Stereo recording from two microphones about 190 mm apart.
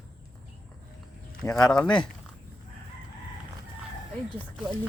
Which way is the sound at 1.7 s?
5° left (ahead or behind).